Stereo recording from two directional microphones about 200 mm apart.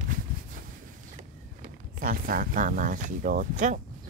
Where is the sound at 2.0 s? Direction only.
45° right (ahead or behind).